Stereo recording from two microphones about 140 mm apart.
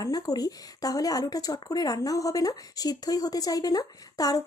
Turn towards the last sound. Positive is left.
turn(degrees=25)  # may be behind; listen again after turning